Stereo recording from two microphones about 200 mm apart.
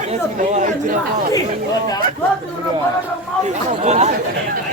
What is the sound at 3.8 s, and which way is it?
Chatter, 35° right (ahead or behind).